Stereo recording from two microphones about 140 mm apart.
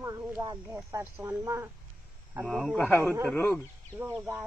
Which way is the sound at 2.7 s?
15° left (ahead or behind).